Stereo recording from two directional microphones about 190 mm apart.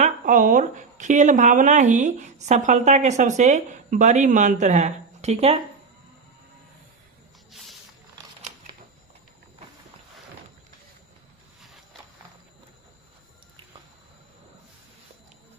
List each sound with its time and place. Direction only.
0.0 s speech: 45° right (ahead or behind)
8.4 s camera: 35° right (ahead or behind)